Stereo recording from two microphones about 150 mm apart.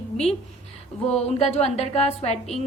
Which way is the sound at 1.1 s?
45° left (ahead or behind).